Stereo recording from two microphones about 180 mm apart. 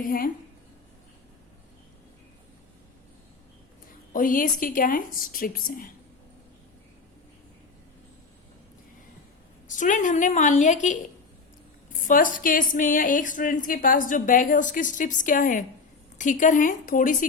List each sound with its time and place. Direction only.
4.1 s speech: 50° left (ahead or behind)
9.6 s speech: 45° left (ahead or behind)